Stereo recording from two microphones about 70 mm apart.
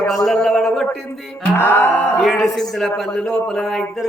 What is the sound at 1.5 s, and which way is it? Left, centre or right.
Music, left.